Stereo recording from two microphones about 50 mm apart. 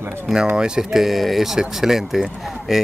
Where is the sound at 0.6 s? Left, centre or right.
Centre.